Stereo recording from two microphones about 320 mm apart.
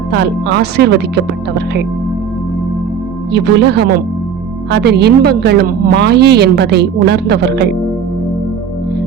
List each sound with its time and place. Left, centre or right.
0.1 s a woman's voice: right
3.3 s a woman's voice: right